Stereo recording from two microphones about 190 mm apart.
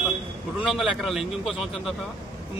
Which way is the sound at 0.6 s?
Centre (ahead or behind).